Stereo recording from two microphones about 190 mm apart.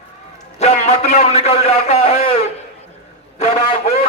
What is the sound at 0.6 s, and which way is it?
A man's voice, 35° left (ahead or behind).